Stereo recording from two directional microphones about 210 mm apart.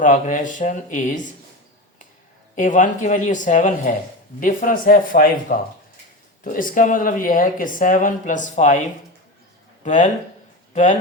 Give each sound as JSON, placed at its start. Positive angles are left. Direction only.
{"t": 0.0, "sound": "speech", "side_deg": 40}
{"t": 2.6, "sound": "speech", "side_deg": 35}
{"t": 9.8, "sound": "speech", "side_deg": 35}